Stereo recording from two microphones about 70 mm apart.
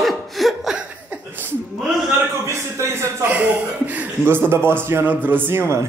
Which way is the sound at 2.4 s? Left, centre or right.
Right.